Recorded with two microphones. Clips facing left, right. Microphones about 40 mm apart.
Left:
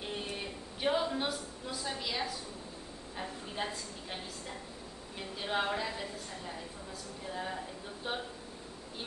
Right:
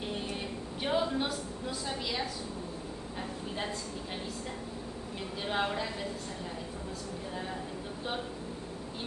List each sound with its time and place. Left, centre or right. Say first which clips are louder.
0.8 s a woman's voice: right 1 dB; centre
5.4 s a woman's voice: right 1 dB; centre